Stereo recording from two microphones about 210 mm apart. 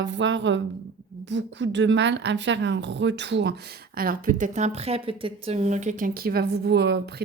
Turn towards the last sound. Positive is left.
turn(degrees=-50)  # may be behind; listen again after turning